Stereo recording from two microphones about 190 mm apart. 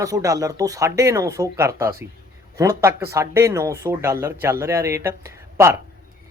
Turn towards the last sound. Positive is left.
turn(degrees=-15)  # may be behind; listen again after turning